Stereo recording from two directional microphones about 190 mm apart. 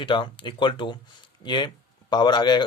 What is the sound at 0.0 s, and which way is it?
Speech, 25° left (ahead or behind).